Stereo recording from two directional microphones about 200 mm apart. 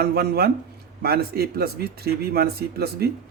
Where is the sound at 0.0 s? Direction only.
50° right (ahead or behind).